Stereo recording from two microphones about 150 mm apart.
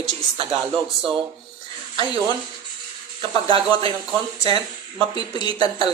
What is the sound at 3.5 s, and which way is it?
Speech, 35° right (ahead or behind).